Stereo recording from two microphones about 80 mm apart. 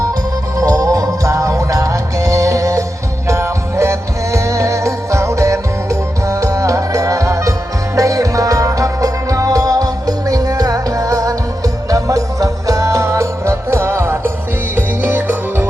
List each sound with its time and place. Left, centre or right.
0.6 s music: right